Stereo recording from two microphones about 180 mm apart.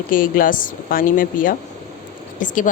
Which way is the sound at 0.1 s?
50° left (ahead or behind).